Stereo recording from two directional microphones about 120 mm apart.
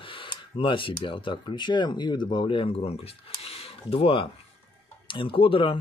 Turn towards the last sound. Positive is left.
turn(degrees=50)  # may be behind; listen again after turning